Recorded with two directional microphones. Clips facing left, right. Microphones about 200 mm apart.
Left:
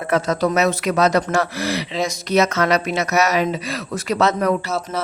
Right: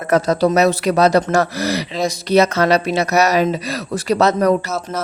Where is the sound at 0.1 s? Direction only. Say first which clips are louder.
Right 4 dB; 35° right (ahead or behind).